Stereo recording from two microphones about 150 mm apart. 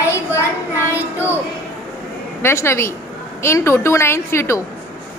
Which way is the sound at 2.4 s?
15° left (ahead or behind).